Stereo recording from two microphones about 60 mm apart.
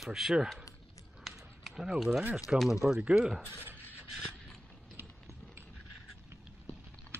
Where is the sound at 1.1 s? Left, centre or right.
Centre.